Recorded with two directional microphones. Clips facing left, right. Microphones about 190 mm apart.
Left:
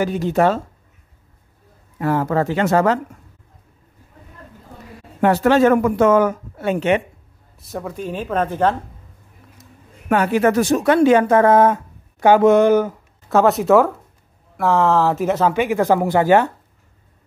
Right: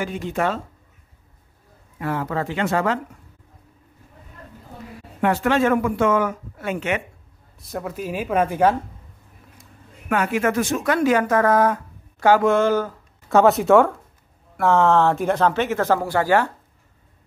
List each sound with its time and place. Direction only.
0.0 s speech: 40° left (ahead or behind)
2.0 s speech: 40° left (ahead or behind)
5.2 s speech: 35° left (ahead or behind)
7.6 s speech: centre (ahead or behind)
10.0 s speech: 35° left (ahead or behind); by 12.9 s 20° left (ahead or behind)
13.3 s speech: centre (ahead or behind); by 16.5 s 20° left (ahead or behind)